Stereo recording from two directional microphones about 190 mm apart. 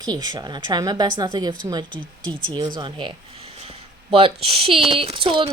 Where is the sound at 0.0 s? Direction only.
20° right (ahead or behind).